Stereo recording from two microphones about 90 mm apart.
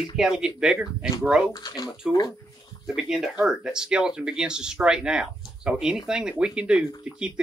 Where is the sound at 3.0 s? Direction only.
5° right (ahead or behind).